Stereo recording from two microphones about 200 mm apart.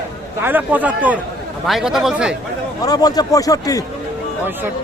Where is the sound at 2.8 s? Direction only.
20° left (ahead or behind).